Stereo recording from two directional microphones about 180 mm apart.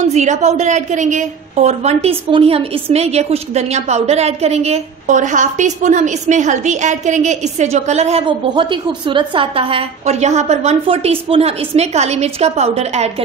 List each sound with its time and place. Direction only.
0.0 s a woman's voice: 40° right (ahead or behind)